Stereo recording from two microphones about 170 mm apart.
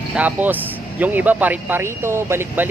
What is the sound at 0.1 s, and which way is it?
Speech, 10° right (ahead or behind).